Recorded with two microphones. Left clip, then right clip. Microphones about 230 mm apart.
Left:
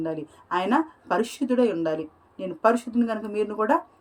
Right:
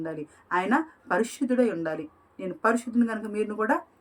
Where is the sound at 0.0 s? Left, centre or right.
Centre.